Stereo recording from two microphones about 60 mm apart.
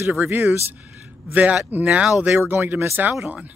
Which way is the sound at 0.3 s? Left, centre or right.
Right.